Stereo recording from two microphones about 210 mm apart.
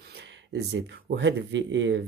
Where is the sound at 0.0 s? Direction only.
55° right (ahead or behind).